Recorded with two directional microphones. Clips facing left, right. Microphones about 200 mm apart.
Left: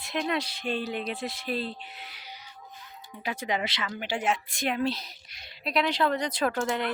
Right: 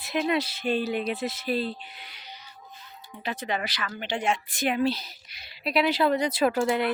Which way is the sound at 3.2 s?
10° left (ahead or behind).